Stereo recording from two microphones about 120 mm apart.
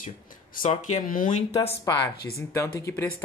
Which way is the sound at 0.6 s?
90° left.